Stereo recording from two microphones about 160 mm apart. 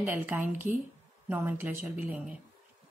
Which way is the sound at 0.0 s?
10° right (ahead or behind).